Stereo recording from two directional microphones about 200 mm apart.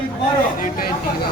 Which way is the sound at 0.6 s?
45° left (ahead or behind).